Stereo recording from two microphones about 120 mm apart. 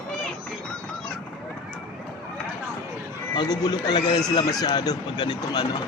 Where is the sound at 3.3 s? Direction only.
35° left (ahead or behind).